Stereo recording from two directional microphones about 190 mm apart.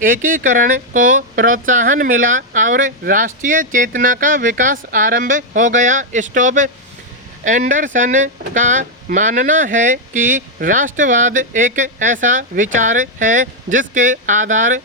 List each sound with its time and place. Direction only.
0.0 s speech: 45° right (ahead or behind)